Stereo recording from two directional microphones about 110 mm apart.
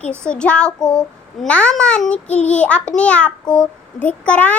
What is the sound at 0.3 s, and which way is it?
A child's voice, 10° left (ahead or behind).